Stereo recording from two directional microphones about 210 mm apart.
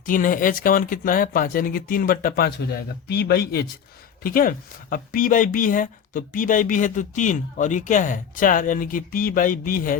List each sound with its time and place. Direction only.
0.0 s speech: 40° left (ahead or behind)